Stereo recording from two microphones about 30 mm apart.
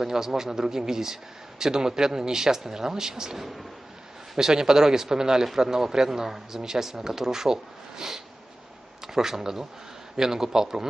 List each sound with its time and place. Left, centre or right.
0.0 s speech: centre